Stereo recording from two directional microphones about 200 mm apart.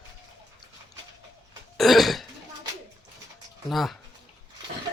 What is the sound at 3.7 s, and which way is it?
Speech, centre (ahead or behind).